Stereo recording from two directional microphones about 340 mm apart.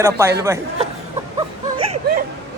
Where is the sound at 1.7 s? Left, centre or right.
Centre.